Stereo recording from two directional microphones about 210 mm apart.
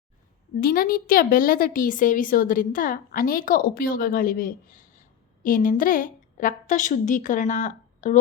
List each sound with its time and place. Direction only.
0.6 s speech: 45° left (ahead or behind)